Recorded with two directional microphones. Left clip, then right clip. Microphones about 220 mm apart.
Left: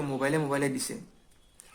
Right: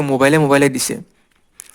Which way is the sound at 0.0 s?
45° right (ahead or behind).